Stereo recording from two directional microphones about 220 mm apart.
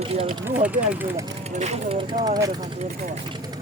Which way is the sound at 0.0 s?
25° right (ahead or behind).